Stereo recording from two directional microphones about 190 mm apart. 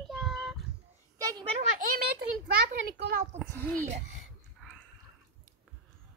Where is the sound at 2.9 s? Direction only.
65° right (ahead or behind).